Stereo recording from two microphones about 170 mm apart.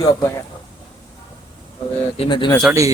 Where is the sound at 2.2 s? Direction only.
30° left (ahead or behind).